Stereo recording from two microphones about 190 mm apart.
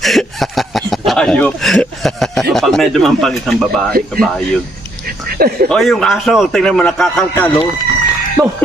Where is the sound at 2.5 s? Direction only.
Centre (ahead or behind).